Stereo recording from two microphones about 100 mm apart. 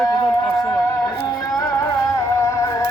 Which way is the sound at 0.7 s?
25° left (ahead or behind).